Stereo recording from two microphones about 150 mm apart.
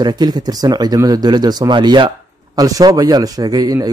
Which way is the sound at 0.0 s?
30° right (ahead or behind).